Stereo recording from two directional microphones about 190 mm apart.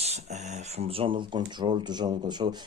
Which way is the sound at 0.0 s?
35° right (ahead or behind).